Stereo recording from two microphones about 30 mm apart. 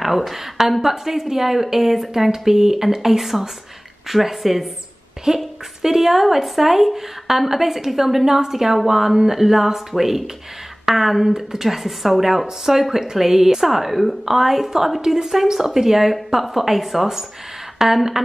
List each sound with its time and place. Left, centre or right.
0.0 s a woman's voice: centre
5.3 s a woman's voice: centre